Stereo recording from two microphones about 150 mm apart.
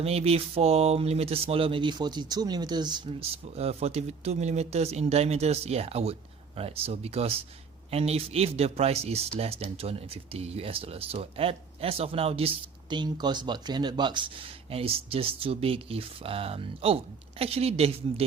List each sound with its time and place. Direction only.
0.0 s speech: 45° right (ahead or behind)